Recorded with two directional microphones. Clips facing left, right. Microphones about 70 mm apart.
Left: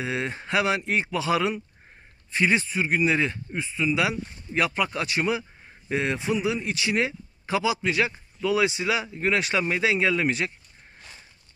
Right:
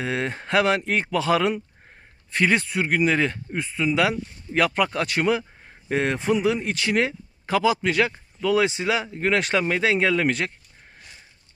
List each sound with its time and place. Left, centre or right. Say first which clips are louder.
0.0 s speech: right 2 dB; right
8.6 s speech: right 2 dB; right
9.1 s speech: right 2 dB; right